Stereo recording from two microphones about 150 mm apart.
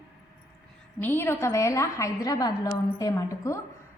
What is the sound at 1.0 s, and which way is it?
A woman's voice, 15° left (ahead or behind).